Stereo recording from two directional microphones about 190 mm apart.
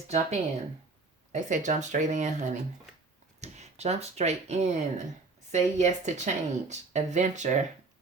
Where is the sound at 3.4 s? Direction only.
35° right (ahead or behind).